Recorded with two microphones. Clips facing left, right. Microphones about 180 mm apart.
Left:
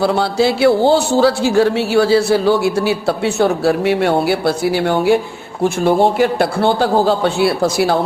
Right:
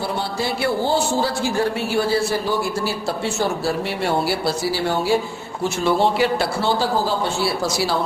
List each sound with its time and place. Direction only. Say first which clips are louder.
0.0 s a man's voice: left 10 dB; 80° left; by 5.2 s 60° left (ahead or behind)
5.6 s a man's voice: left 6 dB; 50° left (ahead or behind)